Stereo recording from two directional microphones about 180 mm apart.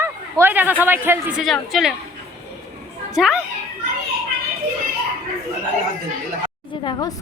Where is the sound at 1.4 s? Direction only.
Centre (ahead or behind).